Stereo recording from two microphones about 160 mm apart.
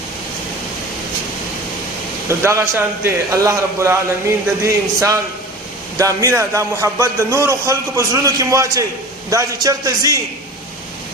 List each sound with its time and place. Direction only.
2.2 s a man's voice: 15° right (ahead or behind)